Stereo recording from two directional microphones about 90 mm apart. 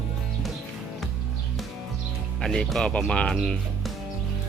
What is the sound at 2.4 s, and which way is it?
Speech, 5° left (ahead or behind).